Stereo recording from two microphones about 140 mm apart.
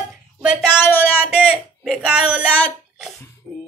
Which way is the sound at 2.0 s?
5° right (ahead or behind).